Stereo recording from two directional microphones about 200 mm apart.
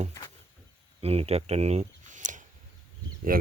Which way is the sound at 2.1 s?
40° right (ahead or behind).